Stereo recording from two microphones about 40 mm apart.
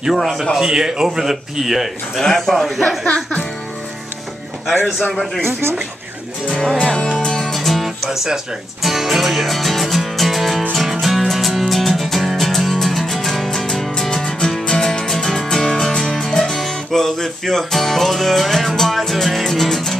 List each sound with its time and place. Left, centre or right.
0.2 s speech: centre
0.6 s speech: centre
2.2 s speech: centre
5.1 s speech: centre
5.4 s speech: right
6.8 s speech: left
7.2 s music: centre
7.5 s music: centre
8.1 s speech: centre
8.8 s music: centre